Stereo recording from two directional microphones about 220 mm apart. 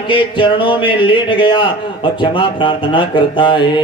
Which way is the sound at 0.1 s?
25° left (ahead or behind).